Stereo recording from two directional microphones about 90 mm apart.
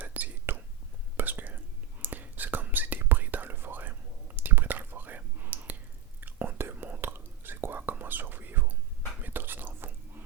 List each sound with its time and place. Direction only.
0.0 s whispering: 20° right (ahead or behind)